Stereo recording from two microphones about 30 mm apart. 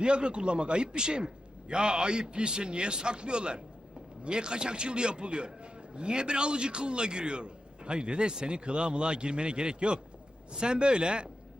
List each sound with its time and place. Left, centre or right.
0.0 s a man's voice: right